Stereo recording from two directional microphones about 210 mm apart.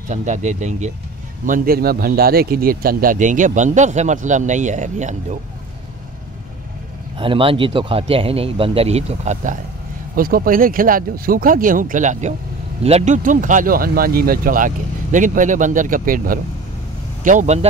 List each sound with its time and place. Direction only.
0.1 s speech: 35° right (ahead or behind)
7.2 s speech: 25° right (ahead or behind)